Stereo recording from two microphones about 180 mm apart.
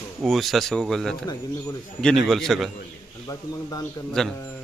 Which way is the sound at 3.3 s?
20° left (ahead or behind).